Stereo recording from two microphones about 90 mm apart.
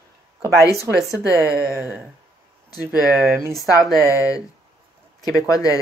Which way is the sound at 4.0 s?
35° left (ahead or behind).